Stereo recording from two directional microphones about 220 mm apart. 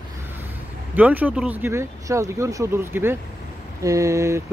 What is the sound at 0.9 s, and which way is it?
Speech, 5° right (ahead or behind).